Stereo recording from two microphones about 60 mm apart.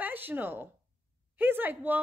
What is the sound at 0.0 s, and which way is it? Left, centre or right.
A woman's voice, right.